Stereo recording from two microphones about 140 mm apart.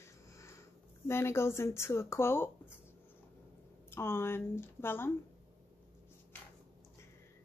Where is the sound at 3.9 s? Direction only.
15° left (ahead or behind).